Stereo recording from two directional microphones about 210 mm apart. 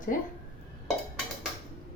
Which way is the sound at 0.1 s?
40° left (ahead or behind).